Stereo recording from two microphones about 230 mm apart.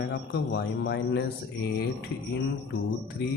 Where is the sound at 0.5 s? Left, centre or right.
Left.